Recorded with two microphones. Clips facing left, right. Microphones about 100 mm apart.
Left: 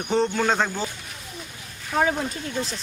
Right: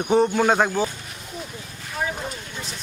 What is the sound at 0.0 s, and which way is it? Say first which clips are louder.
Speech: right 4 dB; 10° right (ahead or behind).